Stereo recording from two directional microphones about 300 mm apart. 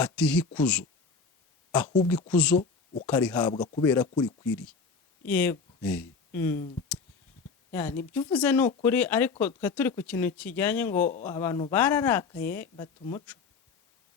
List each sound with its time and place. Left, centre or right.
0.0 s speech: centre
2.0 s speech: centre
3.5 s speech: centre
4.1 s speech: centre
5.2 s speech: centre
7.7 s speech: centre